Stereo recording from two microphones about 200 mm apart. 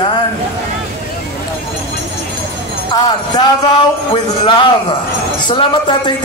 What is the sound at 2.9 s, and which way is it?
A man's voice, 20° left (ahead or behind).